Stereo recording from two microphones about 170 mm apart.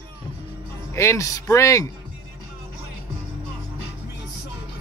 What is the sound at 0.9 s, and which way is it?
Speech, 15° left (ahead or behind).